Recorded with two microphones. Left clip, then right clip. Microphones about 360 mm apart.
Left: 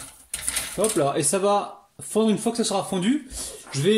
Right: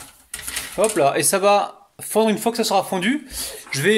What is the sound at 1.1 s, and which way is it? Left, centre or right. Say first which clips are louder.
Speech: right 5 dB; right.